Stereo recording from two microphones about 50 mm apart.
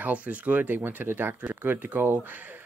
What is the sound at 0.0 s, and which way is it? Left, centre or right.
Speech, right.